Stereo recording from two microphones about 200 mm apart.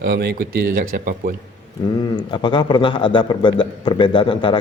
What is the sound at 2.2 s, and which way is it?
A man's voice, 25° left (ahead or behind).